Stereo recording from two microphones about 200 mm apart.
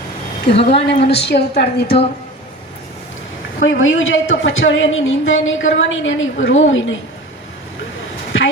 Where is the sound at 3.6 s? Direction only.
75° left (ahead or behind).